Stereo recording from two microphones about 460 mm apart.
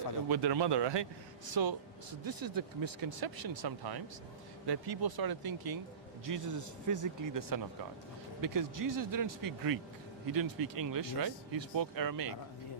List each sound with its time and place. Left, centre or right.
0.3 s speech: right
1.5 s speech: right